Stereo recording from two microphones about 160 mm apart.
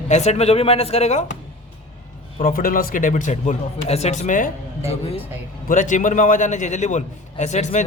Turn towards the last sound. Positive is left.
turn(degrees=45)  # may be behind; listen again after turning